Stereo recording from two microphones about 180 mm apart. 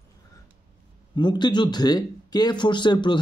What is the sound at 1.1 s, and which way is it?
Speech, 25° left (ahead or behind).